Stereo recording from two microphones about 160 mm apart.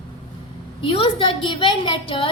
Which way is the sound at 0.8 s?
35° left (ahead or behind).